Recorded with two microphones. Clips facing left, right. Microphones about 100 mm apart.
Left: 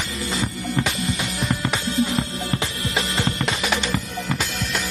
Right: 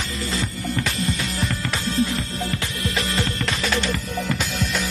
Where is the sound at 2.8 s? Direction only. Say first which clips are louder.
Even; 25° left (ahead or behind).